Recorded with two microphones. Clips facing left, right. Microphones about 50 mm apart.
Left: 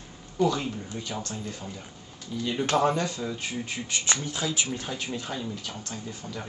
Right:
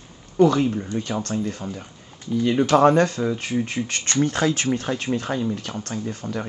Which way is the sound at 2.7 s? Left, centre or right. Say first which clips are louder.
Right 8 dB; right.